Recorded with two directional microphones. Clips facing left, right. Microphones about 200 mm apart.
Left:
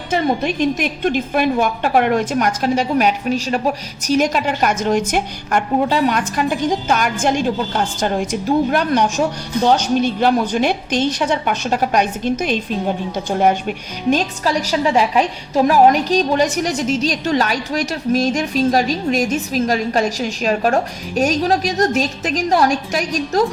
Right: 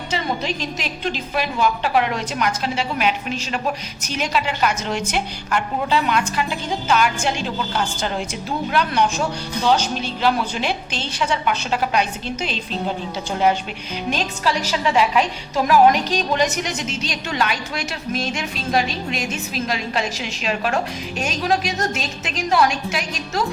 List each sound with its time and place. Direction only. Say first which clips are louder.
0.1 s a woman's voice: left 7 dB; 55° left (ahead or behind)